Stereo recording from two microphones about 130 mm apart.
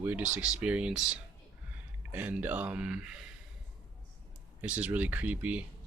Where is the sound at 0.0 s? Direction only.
10° right (ahead or behind).